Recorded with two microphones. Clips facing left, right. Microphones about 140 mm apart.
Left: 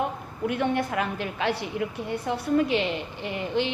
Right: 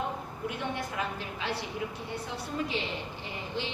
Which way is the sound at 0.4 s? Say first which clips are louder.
Left 10 dB; 60° left (ahead or behind).